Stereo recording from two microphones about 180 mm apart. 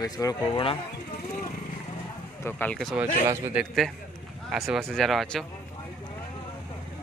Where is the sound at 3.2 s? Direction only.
15° right (ahead or behind).